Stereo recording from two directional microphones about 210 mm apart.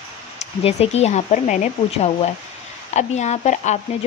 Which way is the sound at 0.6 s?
30° left (ahead or behind).